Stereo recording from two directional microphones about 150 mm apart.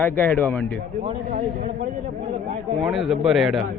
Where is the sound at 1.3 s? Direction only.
65° right (ahead or behind).